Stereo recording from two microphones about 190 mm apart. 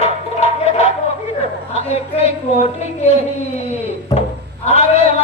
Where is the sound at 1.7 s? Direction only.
35° left (ahead or behind).